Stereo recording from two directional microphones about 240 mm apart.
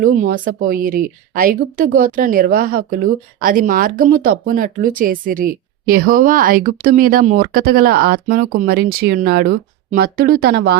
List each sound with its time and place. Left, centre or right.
0.0 s speech: right